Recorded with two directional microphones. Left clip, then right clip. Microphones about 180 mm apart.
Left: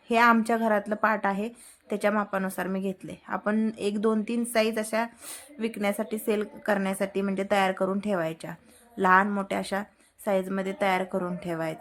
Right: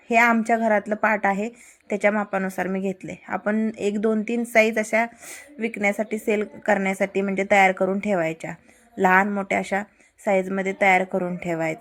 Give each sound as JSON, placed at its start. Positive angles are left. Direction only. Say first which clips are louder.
{"t": 0.1, "sound": "a woman's voice", "louder": "right 3 dB", "side_deg": -10}